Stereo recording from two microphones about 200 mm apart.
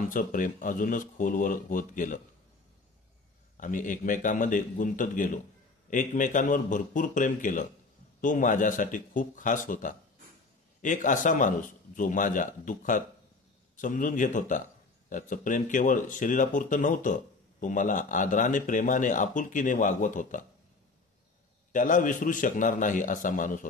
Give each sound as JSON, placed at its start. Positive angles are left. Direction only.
{"t": 0.1, "sound": "speech", "side_deg": 40}
{"t": 3.5, "sound": "speech", "side_deg": 40}
{"t": 21.7, "sound": "speech", "side_deg": 40}